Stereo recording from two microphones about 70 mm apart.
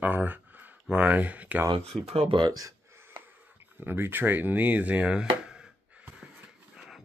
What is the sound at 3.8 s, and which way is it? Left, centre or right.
Speech, right.